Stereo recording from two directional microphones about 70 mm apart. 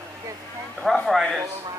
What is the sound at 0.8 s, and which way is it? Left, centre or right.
Speech, centre.